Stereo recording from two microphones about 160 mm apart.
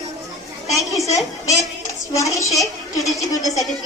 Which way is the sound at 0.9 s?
20° left (ahead or behind).